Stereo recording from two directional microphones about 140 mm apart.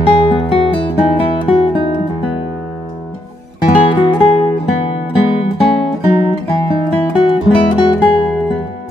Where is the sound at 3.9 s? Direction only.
35° left (ahead or behind).